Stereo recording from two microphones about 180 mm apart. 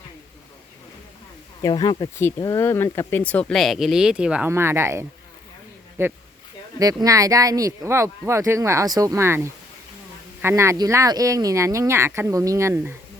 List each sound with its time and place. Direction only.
1.6 s speech: 20° left (ahead or behind); by 12.9 s 15° right (ahead or behind)